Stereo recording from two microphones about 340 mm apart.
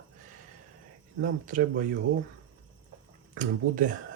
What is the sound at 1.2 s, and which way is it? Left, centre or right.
Speech, right.